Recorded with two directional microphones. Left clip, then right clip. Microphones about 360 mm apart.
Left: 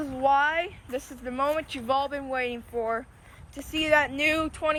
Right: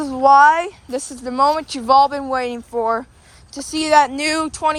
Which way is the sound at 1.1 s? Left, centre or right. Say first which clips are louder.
Right 11 dB; centre.